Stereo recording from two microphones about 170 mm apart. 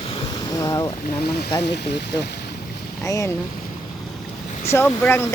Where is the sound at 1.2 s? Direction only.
70° left (ahead or behind).